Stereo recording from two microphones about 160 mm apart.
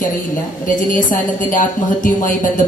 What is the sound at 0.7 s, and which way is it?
Speech, 55° left (ahead or behind).